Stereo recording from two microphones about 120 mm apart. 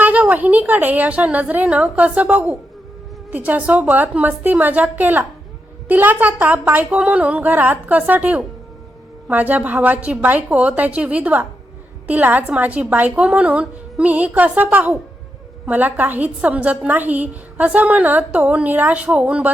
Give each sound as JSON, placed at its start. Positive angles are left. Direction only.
{"t": 0.0, "sound": "a woman's voice", "side_deg": -15}